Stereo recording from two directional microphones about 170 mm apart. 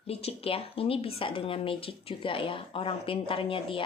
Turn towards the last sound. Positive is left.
turn(degrees=30)  # may be behind; listen again after turning